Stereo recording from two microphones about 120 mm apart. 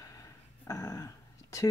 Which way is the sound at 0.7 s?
25° left (ahead or behind).